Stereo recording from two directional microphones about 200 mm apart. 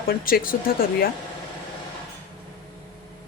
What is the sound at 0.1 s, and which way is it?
A woman's voice, 45° left (ahead or behind).